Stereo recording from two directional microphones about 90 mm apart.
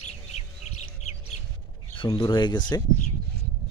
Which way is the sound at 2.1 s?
55° left (ahead or behind).